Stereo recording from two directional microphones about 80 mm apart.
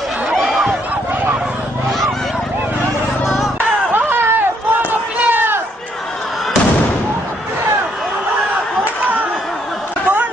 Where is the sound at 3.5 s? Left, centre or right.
Right.